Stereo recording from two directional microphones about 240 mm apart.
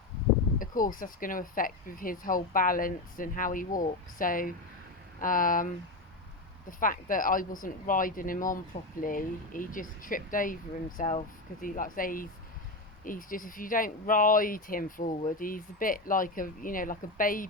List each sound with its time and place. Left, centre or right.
0.6 s speech: left